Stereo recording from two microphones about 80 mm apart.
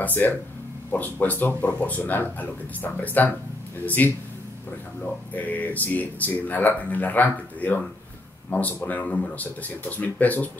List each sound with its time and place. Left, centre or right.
0.0 s speech: left
5.3 s speech: centre